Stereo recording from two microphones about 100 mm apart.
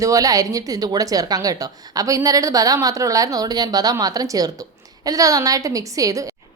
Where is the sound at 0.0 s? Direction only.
35° right (ahead or behind).